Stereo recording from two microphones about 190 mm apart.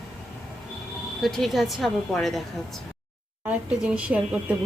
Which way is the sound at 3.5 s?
5° right (ahead or behind).